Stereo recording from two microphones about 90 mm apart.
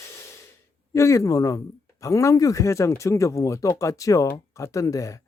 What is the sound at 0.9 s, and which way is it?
Speech, 35° left (ahead or behind).